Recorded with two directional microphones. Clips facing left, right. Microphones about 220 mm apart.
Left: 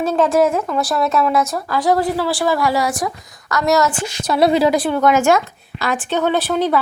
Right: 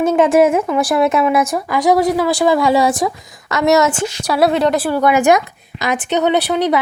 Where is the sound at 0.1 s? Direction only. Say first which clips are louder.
Right 2 dB; 15° right (ahead or behind).